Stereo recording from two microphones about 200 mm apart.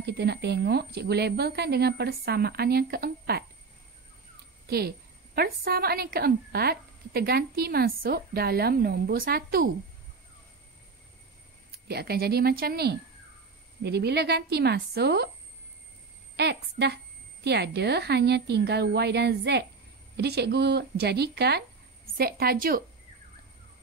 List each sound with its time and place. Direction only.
0.0 s a woman's voice: 55° right (ahead or behind)
4.6 s a woman's voice: 50° right (ahead or behind)
11.9 s a woman's voice: 50° right (ahead or behind)
16.3 s a woman's voice: 55° right (ahead or behind)